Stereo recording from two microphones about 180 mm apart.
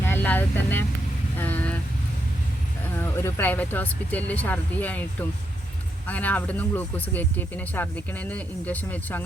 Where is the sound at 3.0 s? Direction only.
10° left (ahead or behind).